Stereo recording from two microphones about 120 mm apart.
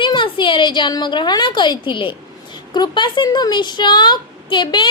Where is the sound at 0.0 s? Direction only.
45° left (ahead or behind).